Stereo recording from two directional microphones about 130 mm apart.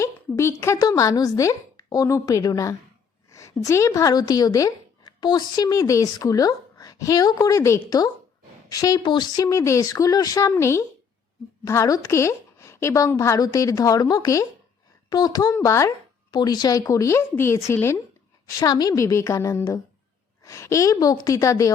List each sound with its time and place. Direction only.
0.0 s a woman's voice: 20° left (ahead or behind)
18.6 s a woman's voice: 30° left (ahead or behind)